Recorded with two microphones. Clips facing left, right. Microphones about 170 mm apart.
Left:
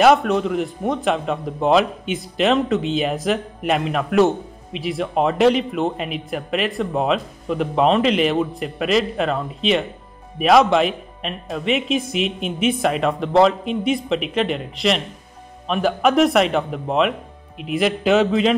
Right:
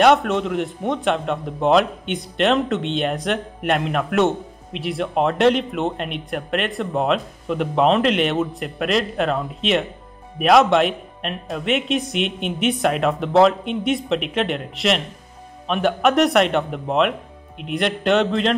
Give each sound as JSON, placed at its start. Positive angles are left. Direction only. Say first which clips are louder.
{"t": 0.0, "sound": "a man's voice", "louder": "left 1 dB", "side_deg": 0}